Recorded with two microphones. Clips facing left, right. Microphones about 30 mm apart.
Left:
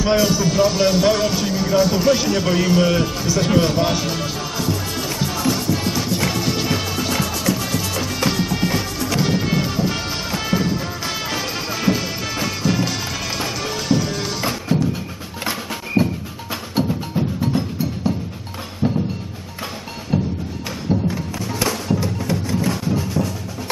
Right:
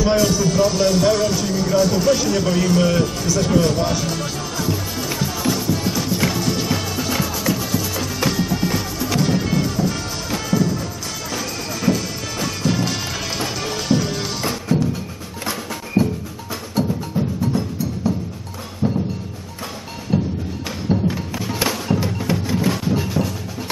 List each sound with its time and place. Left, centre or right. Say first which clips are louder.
0.0 s music: even; centre; by 10.8 s left
11.3 s music: left 2 dB; left
12.6 s music: even; centre
14.4 s music: even; centre
16.0 s music: even; centre
16.8 s wood block: even; left
17.4 s music: left 1 dB; left
20.1 s music: right 1 dB; centre
20.9 s music: right 1 dB; centre